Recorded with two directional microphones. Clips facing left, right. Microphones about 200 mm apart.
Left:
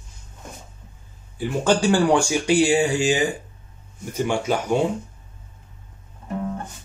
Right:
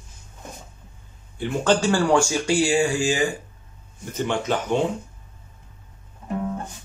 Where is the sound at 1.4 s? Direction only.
15° left (ahead or behind).